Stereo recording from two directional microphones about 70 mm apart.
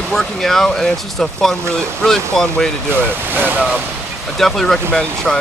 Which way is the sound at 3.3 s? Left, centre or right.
Right.